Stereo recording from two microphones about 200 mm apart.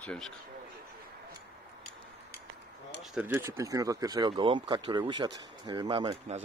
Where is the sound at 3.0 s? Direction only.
10° right (ahead or behind); by 6.3 s 25° right (ahead or behind).